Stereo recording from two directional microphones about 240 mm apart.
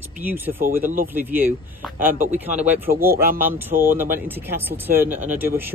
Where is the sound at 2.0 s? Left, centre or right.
Right.